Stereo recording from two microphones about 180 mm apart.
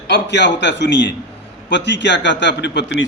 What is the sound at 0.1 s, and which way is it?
A man's voice, 80° left.